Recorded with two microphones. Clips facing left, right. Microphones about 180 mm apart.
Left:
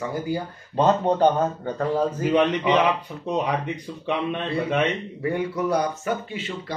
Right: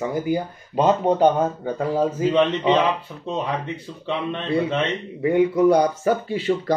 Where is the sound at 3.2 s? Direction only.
15° left (ahead or behind).